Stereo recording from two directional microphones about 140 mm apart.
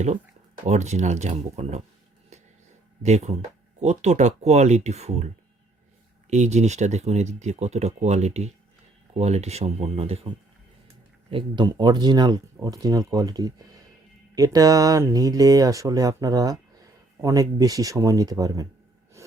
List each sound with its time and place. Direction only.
0.6 s speech: 55° right (ahead or behind)
3.0 s speech: 50° right (ahead or behind)
6.3 s speech: 55° right (ahead or behind); by 18.7 s 25° right (ahead or behind)